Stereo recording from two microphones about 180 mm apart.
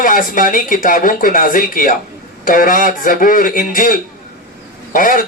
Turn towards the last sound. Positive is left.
turn(degrees=50)  # may be behind; listen again after turning